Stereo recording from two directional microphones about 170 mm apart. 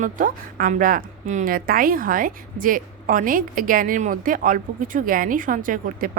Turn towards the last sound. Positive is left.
turn(degrees=-55)  # may be behind; listen again after turning